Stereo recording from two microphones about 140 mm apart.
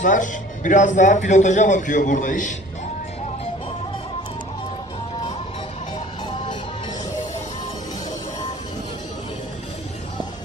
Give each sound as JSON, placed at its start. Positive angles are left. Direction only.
{"t": 0.0, "sound": "a man's voice", "side_deg": 70}